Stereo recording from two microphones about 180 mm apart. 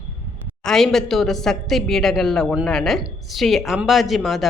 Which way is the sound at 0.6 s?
5° left (ahead or behind).